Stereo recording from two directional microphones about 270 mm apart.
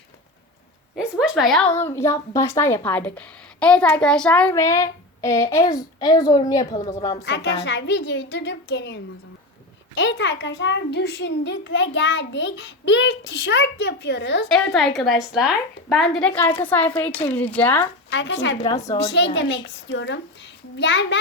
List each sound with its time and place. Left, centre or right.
0.9 s a sound: centre
1.8 s a woman's voice: centre
7.3 s a child's voice: left
14.4 s speech: centre
18.1 s a woman's voice: left
18.6 s a woman's voice: centre
18.9 s a child's voice: left